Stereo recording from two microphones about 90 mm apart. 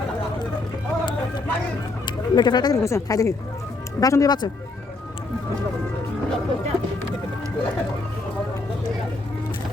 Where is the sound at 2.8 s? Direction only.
35° left (ahead or behind).